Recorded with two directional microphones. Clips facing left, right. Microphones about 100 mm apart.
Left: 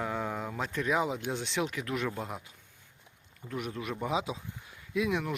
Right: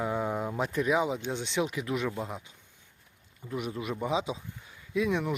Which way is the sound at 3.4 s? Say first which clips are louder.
Right 2 dB; 30° left (ahead or behind).